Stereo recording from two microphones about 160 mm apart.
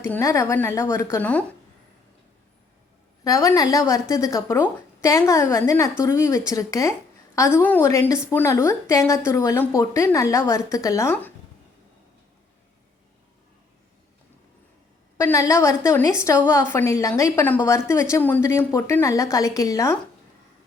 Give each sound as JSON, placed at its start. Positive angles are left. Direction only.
{"t": 0.0, "sound": "a woman's voice", "side_deg": 20}
{"t": 3.2, "sound": "a woman's voice", "side_deg": 20}
{"t": 15.2, "sound": "a woman's voice", "side_deg": 20}